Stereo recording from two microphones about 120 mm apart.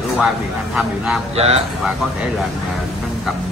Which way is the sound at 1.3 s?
65° right (ahead or behind).